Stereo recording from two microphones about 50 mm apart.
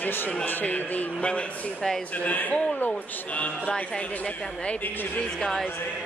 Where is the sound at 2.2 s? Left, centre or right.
Left.